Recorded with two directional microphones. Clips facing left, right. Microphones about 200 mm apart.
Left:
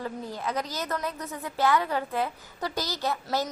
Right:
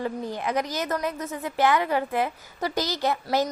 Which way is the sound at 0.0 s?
15° right (ahead or behind).